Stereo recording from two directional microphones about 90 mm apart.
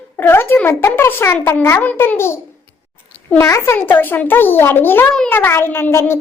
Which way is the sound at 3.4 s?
30° left (ahead or behind).